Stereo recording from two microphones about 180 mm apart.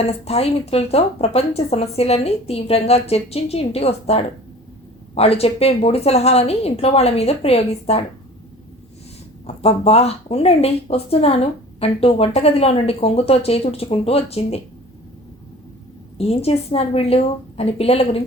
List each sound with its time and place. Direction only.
0.1 s a woman's voice: 35° left (ahead or behind)
9.5 s a woman's voice: 35° left (ahead or behind)
16.1 s a woman's voice: 35° left (ahead or behind)